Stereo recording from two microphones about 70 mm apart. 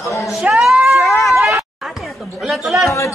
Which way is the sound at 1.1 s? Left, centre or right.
Left.